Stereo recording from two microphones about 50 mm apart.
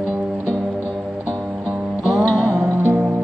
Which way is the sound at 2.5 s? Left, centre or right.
Right.